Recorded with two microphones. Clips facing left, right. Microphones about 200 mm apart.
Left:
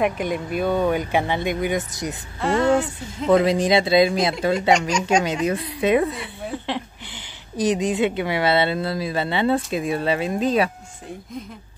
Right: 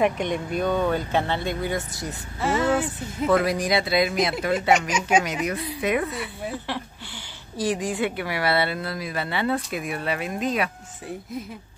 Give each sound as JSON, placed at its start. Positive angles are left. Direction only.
{"t": 0.0, "sound": "speech", "side_deg": 5}
{"t": 2.4, "sound": "speech", "side_deg": -5}
{"t": 3.3, "sound": "speech", "side_deg": 20}